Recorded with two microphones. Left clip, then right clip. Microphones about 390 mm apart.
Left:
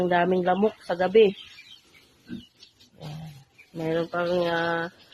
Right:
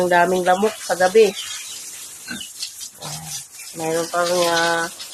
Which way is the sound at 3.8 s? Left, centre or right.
Left.